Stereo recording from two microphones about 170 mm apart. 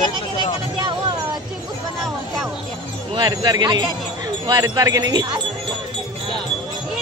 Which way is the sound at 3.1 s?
20° right (ahead or behind).